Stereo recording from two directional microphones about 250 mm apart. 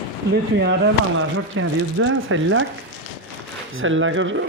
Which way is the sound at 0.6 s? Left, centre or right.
Right.